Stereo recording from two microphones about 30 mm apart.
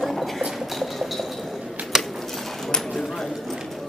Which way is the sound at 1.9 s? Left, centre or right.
Centre.